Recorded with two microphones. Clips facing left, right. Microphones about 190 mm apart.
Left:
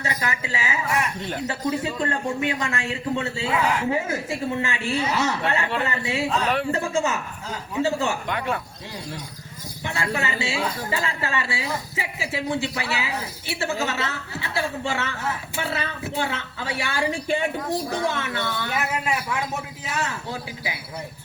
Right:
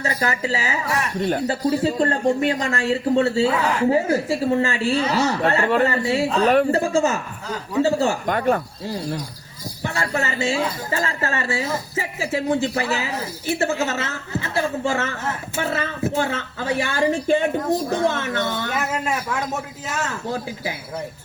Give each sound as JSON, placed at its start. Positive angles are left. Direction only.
{"t": 0.0, "sound": "a woman's voice", "side_deg": -35}